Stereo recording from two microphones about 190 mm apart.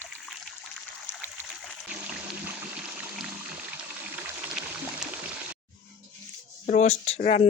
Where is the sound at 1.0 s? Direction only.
10° left (ahead or behind).